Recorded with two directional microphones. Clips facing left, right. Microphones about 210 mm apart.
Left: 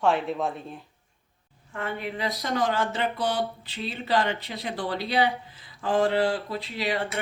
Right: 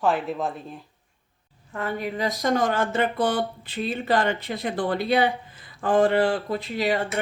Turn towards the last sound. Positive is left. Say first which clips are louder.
# right 4 dB
turn(degrees=-45)  # may be behind; listen again after turning